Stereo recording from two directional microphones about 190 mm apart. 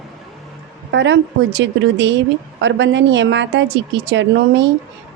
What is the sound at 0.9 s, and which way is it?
A woman's voice, 70° right (ahead or behind).